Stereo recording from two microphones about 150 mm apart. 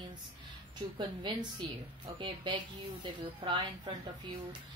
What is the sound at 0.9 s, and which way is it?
A woman's voice, 30° right (ahead or behind).